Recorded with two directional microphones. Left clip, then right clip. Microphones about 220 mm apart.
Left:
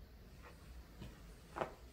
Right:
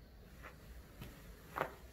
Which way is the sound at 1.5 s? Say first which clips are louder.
Right 2 dB; 50° right (ahead or behind).